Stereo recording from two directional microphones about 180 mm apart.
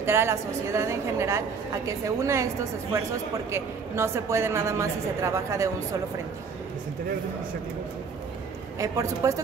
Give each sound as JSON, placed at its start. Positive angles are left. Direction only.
{"t": 0.0, "sound": "a woman's voice", "side_deg": -15}
{"t": 8.7, "sound": "a woman's voice", "side_deg": -20}